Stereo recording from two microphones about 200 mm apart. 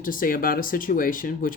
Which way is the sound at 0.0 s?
45° left (ahead or behind).